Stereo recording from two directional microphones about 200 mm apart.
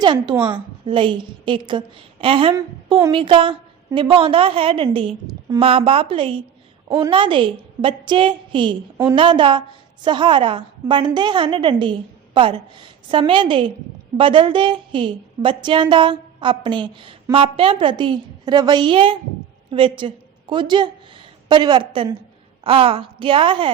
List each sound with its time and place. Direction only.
0.0 s a woman's voice: 20° right (ahead or behind)